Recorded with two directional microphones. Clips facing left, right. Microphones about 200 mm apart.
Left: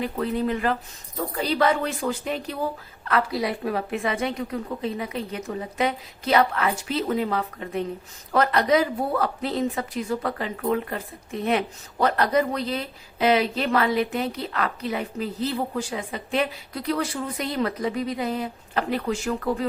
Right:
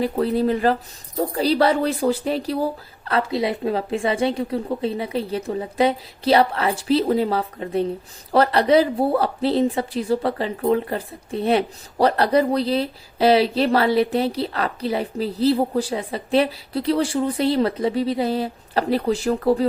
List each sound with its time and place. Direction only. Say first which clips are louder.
0.0 s a woman's voice: right 5 dB; 35° right (ahead or behind)